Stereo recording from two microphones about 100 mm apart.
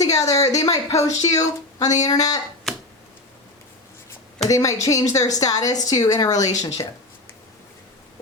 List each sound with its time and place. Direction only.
0.0 s speech: 35° left (ahead or behind)
2.7 s a sound: 5° left (ahead or behind)
4.4 s speech: 35° left (ahead or behind)